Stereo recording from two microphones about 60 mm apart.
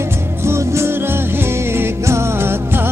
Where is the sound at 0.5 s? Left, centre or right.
Right.